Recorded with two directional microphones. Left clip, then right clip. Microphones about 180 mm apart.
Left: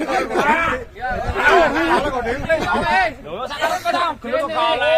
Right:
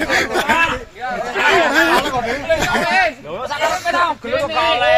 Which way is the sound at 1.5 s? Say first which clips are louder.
Right 3 dB; centre (ahead or behind).